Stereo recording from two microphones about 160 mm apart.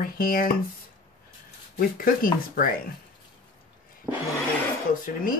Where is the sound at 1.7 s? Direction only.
65° left (ahead or behind).